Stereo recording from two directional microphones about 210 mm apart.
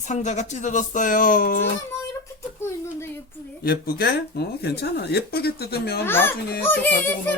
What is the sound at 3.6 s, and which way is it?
Speech, 50° left (ahead or behind).